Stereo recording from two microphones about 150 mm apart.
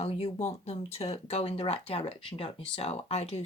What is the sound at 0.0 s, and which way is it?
Speech, 40° left (ahead or behind).